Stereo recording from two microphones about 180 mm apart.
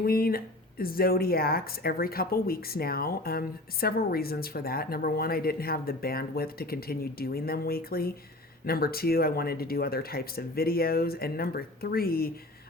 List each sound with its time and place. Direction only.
0.0 s speech: 55° left (ahead or behind)